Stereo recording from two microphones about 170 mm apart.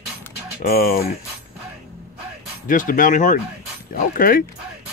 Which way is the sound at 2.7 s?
50° left (ahead or behind).